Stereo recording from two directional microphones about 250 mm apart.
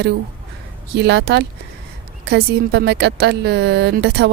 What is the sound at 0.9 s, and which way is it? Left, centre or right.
Speech, right.